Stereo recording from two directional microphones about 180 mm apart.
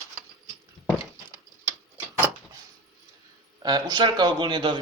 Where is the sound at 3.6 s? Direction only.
25° right (ahead or behind).